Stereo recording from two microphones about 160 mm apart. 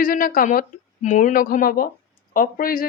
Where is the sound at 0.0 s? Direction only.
60° left (ahead or behind).